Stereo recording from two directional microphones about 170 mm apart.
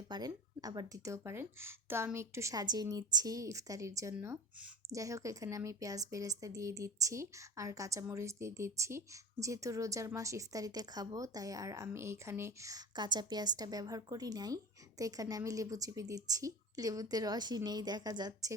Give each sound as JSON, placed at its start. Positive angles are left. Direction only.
{"t": 0.1, "sound": "a woman's voice", "side_deg": -20}